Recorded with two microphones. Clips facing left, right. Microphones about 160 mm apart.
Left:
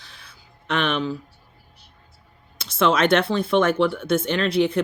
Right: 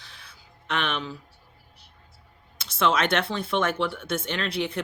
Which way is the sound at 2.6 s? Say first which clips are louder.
Left 4 dB; 35° left (ahead or behind).